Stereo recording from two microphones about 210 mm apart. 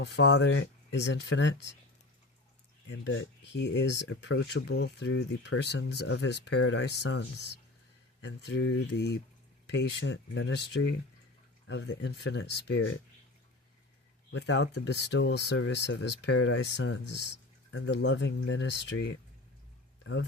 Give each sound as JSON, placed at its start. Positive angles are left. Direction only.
{"t": 0.0, "sound": "speech", "side_deg": 55}
{"t": 3.0, "sound": "speech", "side_deg": 60}
{"t": 14.3, "sound": "speech", "side_deg": 55}